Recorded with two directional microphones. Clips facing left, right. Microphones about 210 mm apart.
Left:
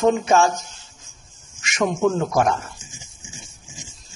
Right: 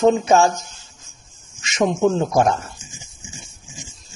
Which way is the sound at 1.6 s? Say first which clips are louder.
Right 2 dB; 25° right (ahead or behind).